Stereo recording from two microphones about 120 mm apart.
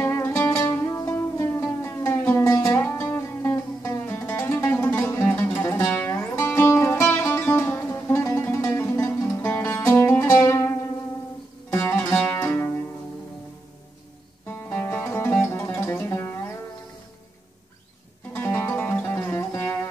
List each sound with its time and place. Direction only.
0.0 s music: 20° left (ahead or behind)
11.7 s music: 20° left (ahead or behind)
14.4 s music: 15° left (ahead or behind)
18.3 s music: 20° left (ahead or behind)